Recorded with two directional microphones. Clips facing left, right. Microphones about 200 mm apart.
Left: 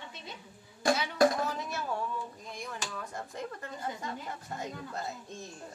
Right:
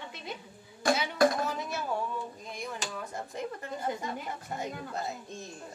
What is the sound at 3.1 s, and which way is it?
A woman's voice, 20° right (ahead or behind).